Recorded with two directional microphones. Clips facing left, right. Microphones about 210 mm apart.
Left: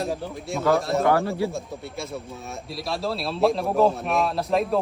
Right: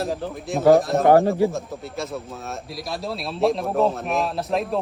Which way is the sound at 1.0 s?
15° right (ahead or behind).